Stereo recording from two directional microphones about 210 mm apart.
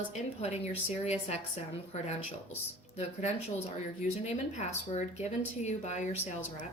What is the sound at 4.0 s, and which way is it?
Speech, 30° left (ahead or behind).